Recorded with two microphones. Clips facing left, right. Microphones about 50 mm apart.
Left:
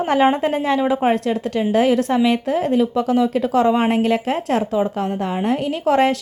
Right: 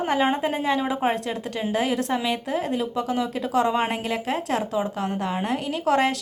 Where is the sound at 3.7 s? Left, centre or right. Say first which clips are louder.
Left 7 dB; centre.